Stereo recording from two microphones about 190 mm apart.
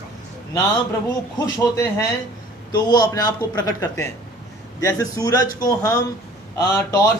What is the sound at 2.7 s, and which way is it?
A man's voice, 20° left (ahead or behind).